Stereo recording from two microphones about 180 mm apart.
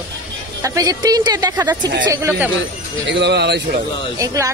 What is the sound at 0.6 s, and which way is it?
A woman's voice, 20° right (ahead or behind).